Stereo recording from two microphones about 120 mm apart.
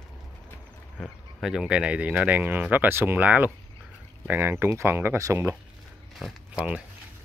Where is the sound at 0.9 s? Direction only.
Centre (ahead or behind); by 5.6 s 20° right (ahead or behind).